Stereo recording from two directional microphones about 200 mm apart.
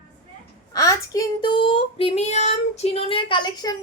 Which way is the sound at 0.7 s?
15° left (ahead or behind).